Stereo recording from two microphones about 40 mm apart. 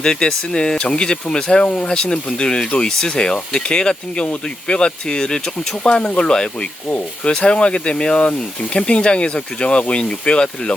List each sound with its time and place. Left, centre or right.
0.0 s speech: centre